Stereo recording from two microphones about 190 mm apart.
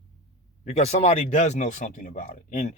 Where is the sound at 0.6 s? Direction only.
35° left (ahead or behind).